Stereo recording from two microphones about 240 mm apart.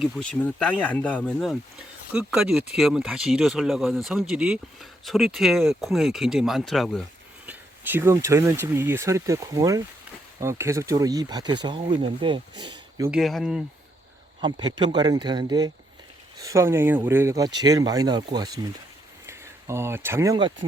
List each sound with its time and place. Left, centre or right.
0.0 s speech: centre
13.1 s speech: centre
14.4 s speech: centre